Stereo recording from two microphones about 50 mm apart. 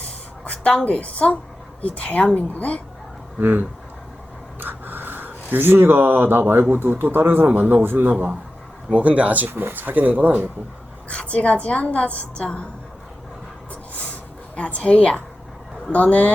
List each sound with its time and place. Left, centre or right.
0.7 s a woman's voice: left
3.3 s a man's voice: right
7.4 s speech: right
8.9 s speech: right
9.5 s speech: right
11.1 s a woman's voice: left
14.5 s a woman's voice: left